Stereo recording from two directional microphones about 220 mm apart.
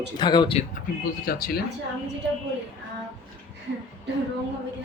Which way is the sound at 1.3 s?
40° left (ahead or behind).